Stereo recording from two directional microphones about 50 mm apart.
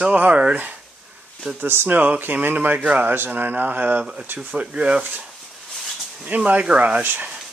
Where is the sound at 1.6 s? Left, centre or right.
Right.